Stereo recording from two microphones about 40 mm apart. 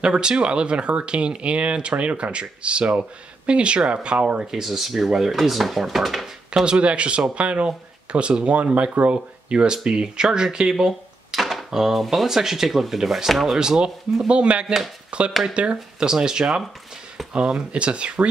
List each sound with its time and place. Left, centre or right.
0.0 s speech: centre
4.6 s speech: centre
6.5 s speech: right
10.7 s cash register: centre
11.7 s speech: centre
13.6 s speech: centre
16.1 s speech: centre